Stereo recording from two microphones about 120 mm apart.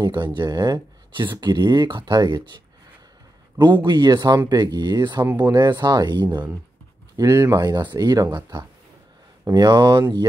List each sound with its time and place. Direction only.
0.0 s speech: 35° right (ahead or behind)
3.6 s speech: 40° right (ahead or behind)
9.4 s speech: 30° right (ahead or behind)